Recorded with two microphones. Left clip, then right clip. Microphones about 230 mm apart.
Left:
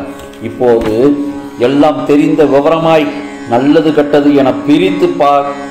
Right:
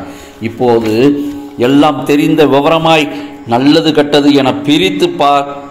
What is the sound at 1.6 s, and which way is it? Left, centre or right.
A man's voice, right.